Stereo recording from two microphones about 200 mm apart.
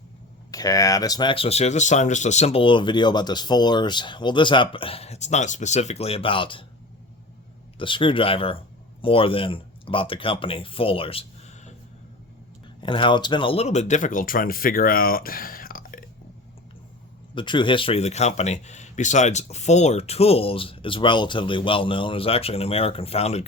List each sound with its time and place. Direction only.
0.5 s speech: 20° left (ahead or behind)
7.8 s speech: 25° left (ahead or behind)
12.8 s speech: 25° left (ahead or behind); by 16.0 s 45° left (ahead or behind)
17.3 s speech: 25° left (ahead or behind)